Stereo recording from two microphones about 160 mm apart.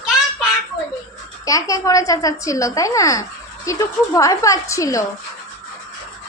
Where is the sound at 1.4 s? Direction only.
20° left (ahead or behind).